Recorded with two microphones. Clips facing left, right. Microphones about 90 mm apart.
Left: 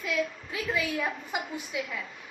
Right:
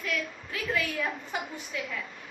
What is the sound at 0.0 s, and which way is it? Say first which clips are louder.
A woman's voice: left 3 dB; 20° left (ahead or behind).